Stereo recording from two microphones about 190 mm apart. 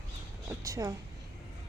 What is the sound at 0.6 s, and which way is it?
Speech, 15° right (ahead or behind).